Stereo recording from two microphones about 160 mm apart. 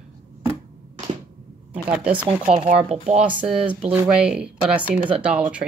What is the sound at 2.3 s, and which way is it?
Speech, 45° right (ahead or behind).